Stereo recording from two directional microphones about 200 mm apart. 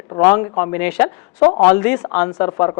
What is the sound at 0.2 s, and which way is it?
Speech, 10° left (ahead or behind).